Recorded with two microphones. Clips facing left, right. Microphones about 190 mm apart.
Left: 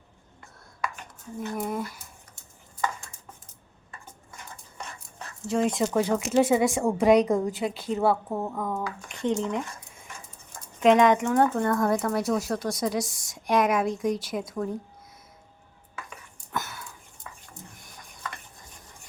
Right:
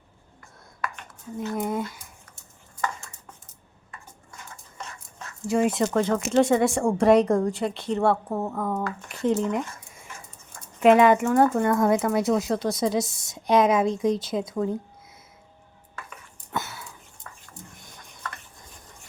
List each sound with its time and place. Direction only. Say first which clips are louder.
1.4 s a woman's voice: right 3 dB; 20° right (ahead or behind)
5.5 s speech: right 2 dB; 10° right (ahead or behind)
5.9 s speech: right 1 dB; 10° left (ahead or behind); by 11.8 s 5° right (ahead or behind)
12.1 s a woman's voice: right 3 dB; 20° right (ahead or behind)
16.5 s a sound: right 2 dB; 25° right (ahead or behind)
17.2 s a sound: left 1 dB; 10° left (ahead or behind)